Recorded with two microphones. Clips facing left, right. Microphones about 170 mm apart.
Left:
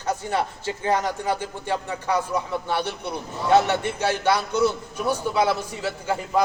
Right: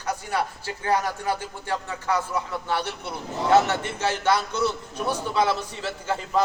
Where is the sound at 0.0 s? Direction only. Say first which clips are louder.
Left 2 dB; 25° left (ahead or behind).